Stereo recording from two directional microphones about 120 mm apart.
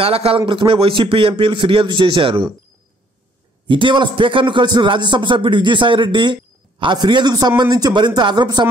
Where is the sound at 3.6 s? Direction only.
45° right (ahead or behind).